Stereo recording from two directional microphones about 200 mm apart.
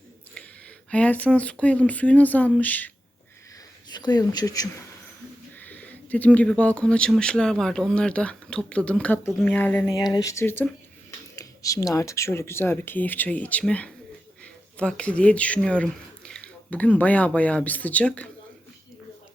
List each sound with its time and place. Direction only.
0.9 s speech: 5° left (ahead or behind)
3.8 s speech: 20° left (ahead or behind)
10.0 s speech: 20° left (ahead or behind)